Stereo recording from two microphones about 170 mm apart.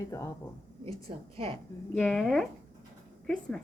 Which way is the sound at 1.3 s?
35° right (ahead or behind).